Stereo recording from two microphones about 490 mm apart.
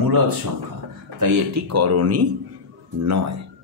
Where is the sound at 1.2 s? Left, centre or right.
Right.